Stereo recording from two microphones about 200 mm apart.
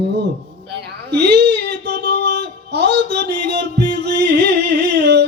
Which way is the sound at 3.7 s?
55° right (ahead or behind).